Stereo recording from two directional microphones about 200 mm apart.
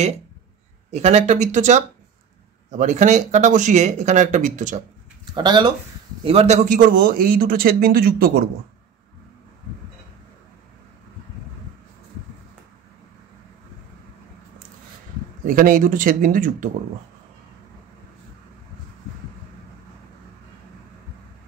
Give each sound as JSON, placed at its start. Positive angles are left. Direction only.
{"t": 0.9, "sound": "speech", "side_deg": -35}
{"t": 5.3, "sound": "speech", "side_deg": -20}
{"t": 6.2, "sound": "a man's voice", "side_deg": -30}
{"t": 15.4, "sound": "a man's voice", "side_deg": -45}